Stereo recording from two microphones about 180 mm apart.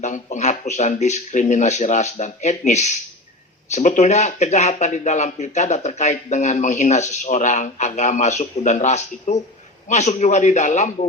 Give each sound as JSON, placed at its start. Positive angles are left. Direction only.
{"t": 0.0, "sound": "speech", "side_deg": 40}